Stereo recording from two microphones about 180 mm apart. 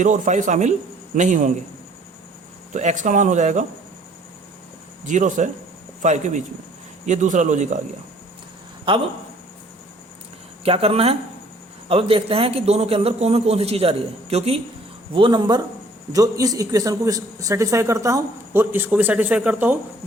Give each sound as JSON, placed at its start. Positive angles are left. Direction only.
{"t": 0.0, "sound": "speech", "side_deg": -45}
{"t": 2.7, "sound": "speech", "side_deg": -40}
{"t": 5.0, "sound": "a man's voice", "side_deg": -45}
{"t": 8.9, "sound": "speech", "side_deg": -30}
{"t": 10.6, "sound": "a man's voice", "side_deg": -30}